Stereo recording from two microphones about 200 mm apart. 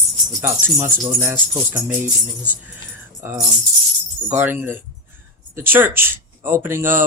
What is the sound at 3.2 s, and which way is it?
Speech, 15° right (ahead or behind).